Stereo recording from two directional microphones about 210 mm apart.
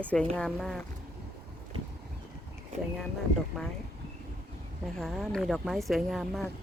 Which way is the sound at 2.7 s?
30° right (ahead or behind).